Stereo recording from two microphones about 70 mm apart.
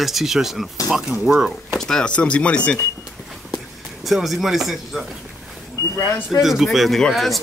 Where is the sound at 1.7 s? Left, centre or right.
Centre.